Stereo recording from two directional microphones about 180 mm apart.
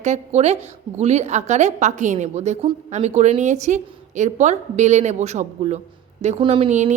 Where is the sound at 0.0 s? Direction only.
40° right (ahead or behind).